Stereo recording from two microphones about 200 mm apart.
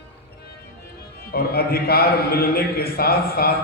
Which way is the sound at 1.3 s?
50° left (ahead or behind).